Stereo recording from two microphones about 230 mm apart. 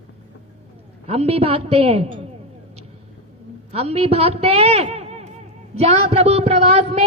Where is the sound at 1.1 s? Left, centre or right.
Right.